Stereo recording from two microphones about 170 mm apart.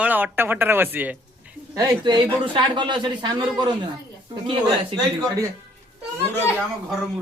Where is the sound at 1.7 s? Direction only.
25° right (ahead or behind).